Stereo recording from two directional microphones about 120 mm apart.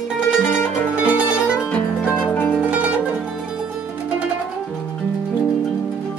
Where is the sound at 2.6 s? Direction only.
10° right (ahead or behind).